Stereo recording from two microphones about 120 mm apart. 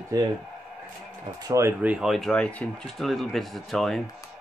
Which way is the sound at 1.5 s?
25° right (ahead or behind).